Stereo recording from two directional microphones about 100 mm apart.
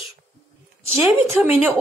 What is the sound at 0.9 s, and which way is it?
Speech, 25° right (ahead or behind).